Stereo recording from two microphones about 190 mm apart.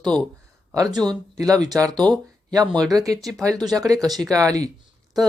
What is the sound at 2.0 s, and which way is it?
Speech, 10° left (ahead or behind).